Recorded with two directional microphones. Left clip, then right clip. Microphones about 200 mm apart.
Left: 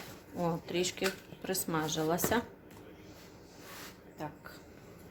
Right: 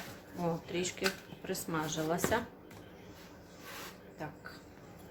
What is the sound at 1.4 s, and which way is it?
Speech, 40° left (ahead or behind).